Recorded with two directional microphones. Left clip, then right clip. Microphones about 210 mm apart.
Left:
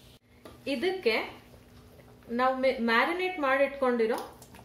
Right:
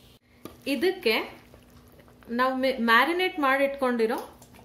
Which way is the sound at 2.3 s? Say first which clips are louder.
Right 1 dB; 50° right (ahead or behind).